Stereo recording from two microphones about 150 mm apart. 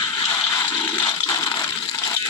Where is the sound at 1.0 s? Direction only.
25° left (ahead or behind).